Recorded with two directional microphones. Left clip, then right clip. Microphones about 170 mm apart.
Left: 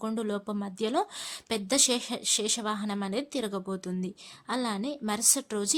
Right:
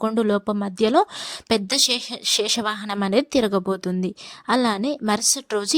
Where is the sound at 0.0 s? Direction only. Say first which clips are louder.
Right 12 dB; 45° right (ahead or behind).